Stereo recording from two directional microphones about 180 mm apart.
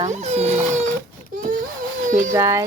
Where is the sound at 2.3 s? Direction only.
15° right (ahead or behind).